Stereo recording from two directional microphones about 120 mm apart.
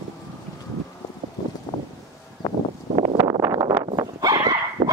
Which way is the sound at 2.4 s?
30° left (ahead or behind).